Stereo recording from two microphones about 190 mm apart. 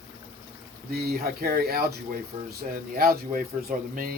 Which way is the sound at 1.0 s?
50° right (ahead or behind).